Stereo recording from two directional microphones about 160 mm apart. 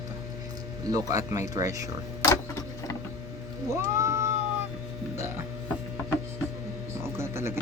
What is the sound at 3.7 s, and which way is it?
Cat, 20° right (ahead or behind).